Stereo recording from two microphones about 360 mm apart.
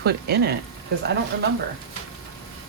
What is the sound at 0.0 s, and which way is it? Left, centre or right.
Speech, right.